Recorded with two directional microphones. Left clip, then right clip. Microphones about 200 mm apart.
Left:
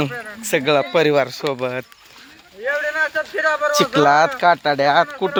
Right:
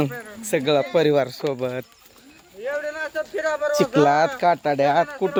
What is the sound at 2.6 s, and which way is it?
A man's voice, 35° left (ahead or behind).